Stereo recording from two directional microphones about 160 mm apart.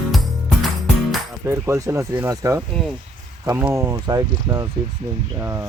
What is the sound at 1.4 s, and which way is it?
Speech, 15° right (ahead or behind).